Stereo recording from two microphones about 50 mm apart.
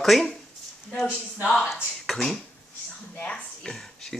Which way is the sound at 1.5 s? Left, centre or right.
Centre.